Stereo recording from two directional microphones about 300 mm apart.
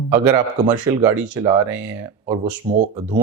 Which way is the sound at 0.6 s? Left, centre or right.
Centre.